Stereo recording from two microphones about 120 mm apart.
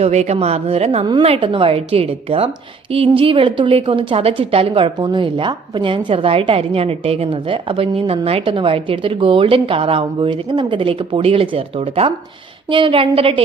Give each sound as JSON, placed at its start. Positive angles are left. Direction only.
{"t": 0.0, "sound": "speech", "side_deg": -65}
{"t": 1.4, "sound": "a woman's voice", "side_deg": -45}